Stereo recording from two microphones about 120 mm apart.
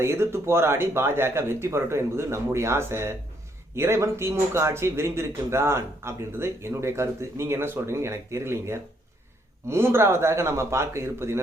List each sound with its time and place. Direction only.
0.0 s speech: 20° right (ahead or behind)